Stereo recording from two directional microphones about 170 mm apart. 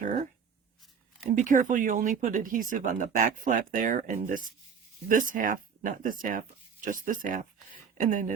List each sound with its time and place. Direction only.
1.4 s speech: 50° right (ahead or behind)